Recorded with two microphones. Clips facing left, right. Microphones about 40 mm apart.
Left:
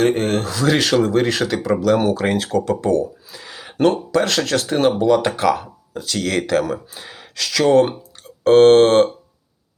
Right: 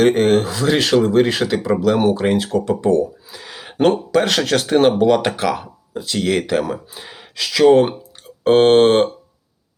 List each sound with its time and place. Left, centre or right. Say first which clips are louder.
0.0 s speech: right 4 dB; right
0.4 s speech: even; centre
2.6 s speech: right 1 dB; centre
3.4 s a sound: right 1 dB; right
3.8 s speech: right 1 dB; right
5.5 s speech: left 3 dB; centre